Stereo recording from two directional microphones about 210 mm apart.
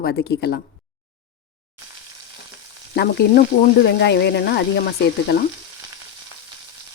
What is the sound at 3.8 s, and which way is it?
A woman's voice, 55° left (ahead or behind).